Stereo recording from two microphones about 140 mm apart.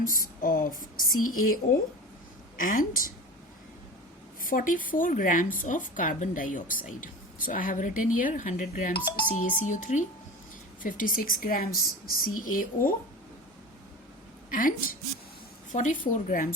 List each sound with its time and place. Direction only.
0.0 s a woman's voice: 80° left
2.6 s a woman's voice: 80° left
4.4 s a woman's voice: 80° left
14.5 s a woman's voice: 80° left
15.7 s a woman's voice: 65° left (ahead or behind)